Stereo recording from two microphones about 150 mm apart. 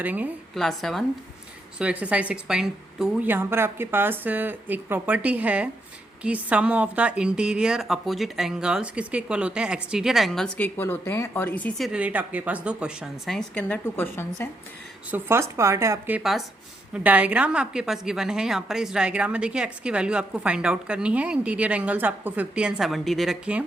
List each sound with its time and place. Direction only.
0.0 s a woman's voice: 10° right (ahead or behind)
0.5 s a woman's voice: centre (ahead or behind)
10.8 s speech: 15° left (ahead or behind)
11.9 s a woman's voice: 10° right (ahead or behind); by 14.4 s 15° left (ahead or behind)
15.1 s a woman's voice: 15° right (ahead or behind)
16.2 s a woman's voice: centre (ahead or behind)